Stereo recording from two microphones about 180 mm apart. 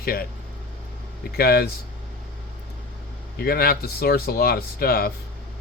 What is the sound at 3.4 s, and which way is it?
Speech, 55° left (ahead or behind).